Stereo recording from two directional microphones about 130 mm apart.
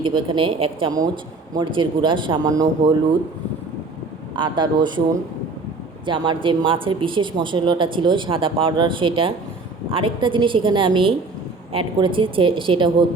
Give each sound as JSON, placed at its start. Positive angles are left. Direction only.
{"t": 0.0, "sound": "speech", "side_deg": -40}
{"t": 4.4, "sound": "speech", "side_deg": -35}
{"t": 6.1, "sound": "speech", "side_deg": -40}